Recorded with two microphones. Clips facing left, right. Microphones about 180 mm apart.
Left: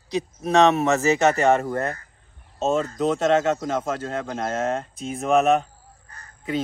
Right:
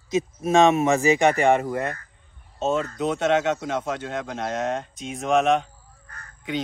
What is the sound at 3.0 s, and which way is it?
A man's voice, 5° right (ahead or behind).